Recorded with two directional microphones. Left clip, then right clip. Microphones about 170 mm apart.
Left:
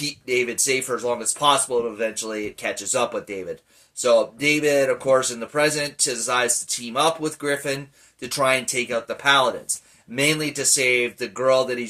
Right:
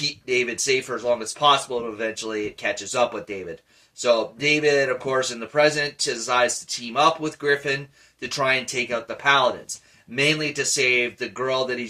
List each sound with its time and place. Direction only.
0.0 s speech: 20° left (ahead or behind)